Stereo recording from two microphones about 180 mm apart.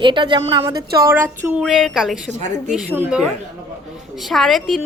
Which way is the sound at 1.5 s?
Centre (ahead or behind).